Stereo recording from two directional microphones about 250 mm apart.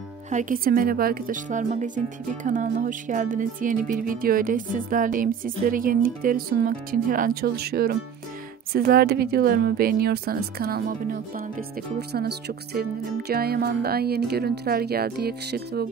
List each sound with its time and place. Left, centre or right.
0.3 s speech: right